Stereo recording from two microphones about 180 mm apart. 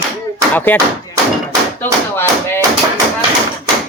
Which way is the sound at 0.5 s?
10° left (ahead or behind).